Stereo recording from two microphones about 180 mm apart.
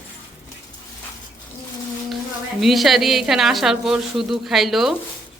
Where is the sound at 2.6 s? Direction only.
Centre (ahead or behind).